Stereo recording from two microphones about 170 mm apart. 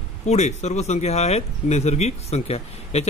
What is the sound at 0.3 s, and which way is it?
Speech, 40° left (ahead or behind).